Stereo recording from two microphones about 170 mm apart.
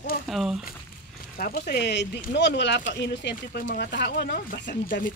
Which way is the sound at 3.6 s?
65° left (ahead or behind).